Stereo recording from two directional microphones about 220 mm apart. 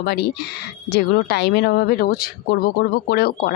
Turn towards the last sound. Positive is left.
turn(degrees=45)  # may be behind; listen again after turning